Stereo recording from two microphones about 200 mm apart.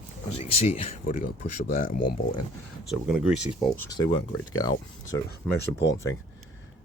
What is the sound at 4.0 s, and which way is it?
Speech, 25° left (ahead or behind).